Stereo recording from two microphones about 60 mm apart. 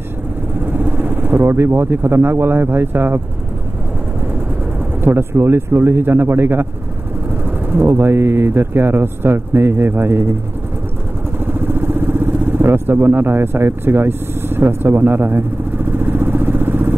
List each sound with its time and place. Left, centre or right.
0.7 s speech: right
5.0 s speech: right
7.7 s speech: right
11.3 s vehicle: right